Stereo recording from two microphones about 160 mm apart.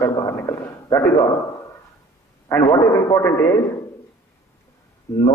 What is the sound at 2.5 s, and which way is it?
Speech, 15° left (ahead or behind).